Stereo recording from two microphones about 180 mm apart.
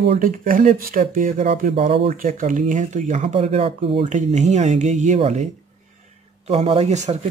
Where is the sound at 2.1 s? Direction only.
50° right (ahead or behind).